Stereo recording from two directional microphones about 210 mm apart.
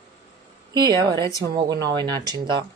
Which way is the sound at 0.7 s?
20° right (ahead or behind).